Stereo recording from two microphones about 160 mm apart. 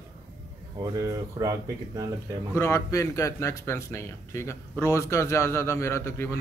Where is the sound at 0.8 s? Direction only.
20° right (ahead or behind).